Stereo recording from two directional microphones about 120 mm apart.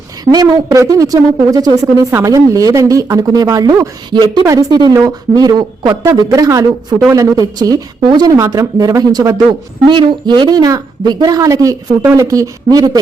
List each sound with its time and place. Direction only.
0.3 s a woman's voice: 35° right (ahead or behind)
9.8 s a woman's voice: 45° right (ahead or behind)